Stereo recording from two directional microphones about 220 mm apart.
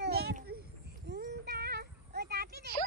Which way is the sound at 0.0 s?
45° right (ahead or behind).